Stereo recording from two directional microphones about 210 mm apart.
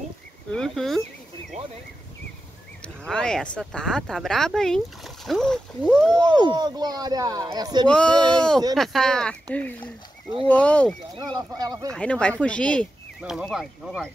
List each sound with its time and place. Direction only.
0.5 s speech: centre (ahead or behind)
3.1 s speech: 5° left (ahead or behind)
6.4 s speech: 20° right (ahead or behind)
7.9 s speech: 5° left (ahead or behind)
8.2 s speech: 20° right (ahead or behind)
8.7 s speech: centre (ahead or behind)
11.1 s speech: 20° right (ahead or behind)
11.9 s speech: 5° left (ahead or behind)